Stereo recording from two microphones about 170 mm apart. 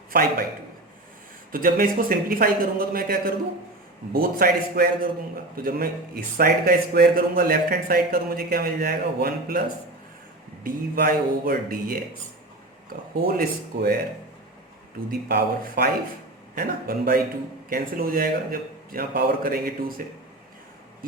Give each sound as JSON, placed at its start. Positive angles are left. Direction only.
{"t": 0.1, "sound": "speech", "side_deg": -60}
{"t": 1.5, "sound": "speech", "side_deg": -55}
{"t": 13.2, "sound": "speech", "side_deg": -60}
{"t": 15.3, "sound": "speech", "side_deg": -60}